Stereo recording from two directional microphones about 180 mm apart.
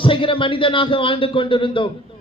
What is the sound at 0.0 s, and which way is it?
A man's voice, 30° left (ahead or behind).